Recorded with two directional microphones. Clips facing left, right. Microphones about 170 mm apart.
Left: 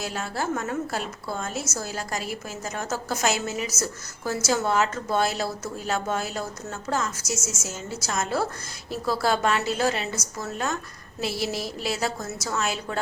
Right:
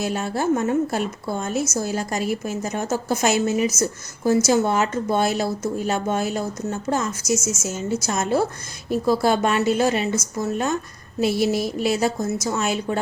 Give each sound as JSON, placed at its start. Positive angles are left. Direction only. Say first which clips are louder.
{"t": 0.0, "sound": "a woman's voice", "louder": "right 6 dB", "side_deg": -20}
{"t": 11.2, "sound": "a woman's voice", "louder": "right 8 dB", "side_deg": -20}